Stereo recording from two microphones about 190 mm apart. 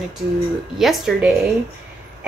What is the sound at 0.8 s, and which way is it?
Speech, centre (ahead or behind).